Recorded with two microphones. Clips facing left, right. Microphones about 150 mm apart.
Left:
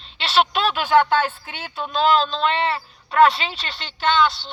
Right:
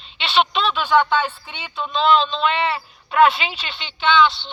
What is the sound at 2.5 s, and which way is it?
Speech, 35° left (ahead or behind).